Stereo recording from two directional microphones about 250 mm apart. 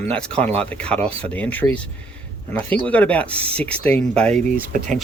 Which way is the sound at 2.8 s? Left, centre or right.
Centre.